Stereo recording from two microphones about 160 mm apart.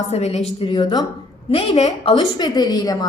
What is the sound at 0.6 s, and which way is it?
A woman's voice, 30° left (ahead or behind).